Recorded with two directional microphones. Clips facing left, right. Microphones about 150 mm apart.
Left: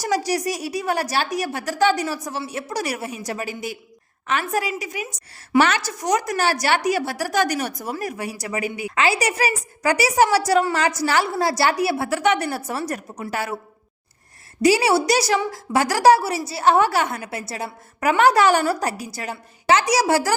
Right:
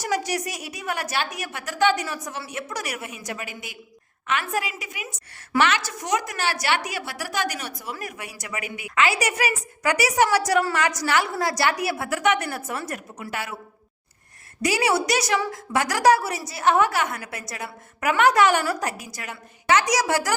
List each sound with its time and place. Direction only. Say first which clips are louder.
0.0 s a woman's voice: left 4 dB; 35° left (ahead or behind)
14.6 s a woman's voice: left 5 dB; 30° left (ahead or behind)